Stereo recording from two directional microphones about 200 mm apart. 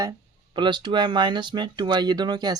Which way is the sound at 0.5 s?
25° right (ahead or behind).